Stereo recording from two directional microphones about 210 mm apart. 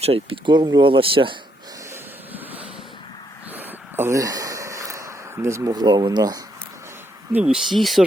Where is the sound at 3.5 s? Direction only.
10° right (ahead or behind).